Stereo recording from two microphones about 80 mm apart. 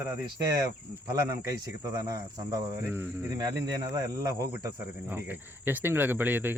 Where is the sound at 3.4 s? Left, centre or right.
Right.